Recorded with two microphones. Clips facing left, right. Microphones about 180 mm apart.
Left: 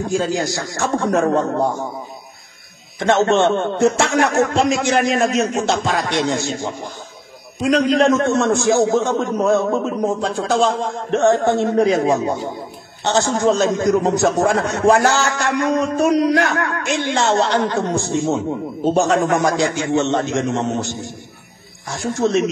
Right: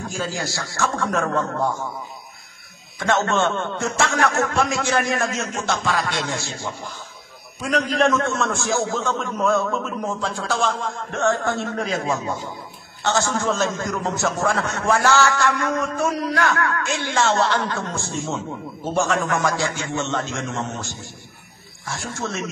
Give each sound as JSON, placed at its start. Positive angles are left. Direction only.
{"t": 0.1, "sound": "a man's voice", "side_deg": 20}
{"t": 3.0, "sound": "a man's voice", "side_deg": 20}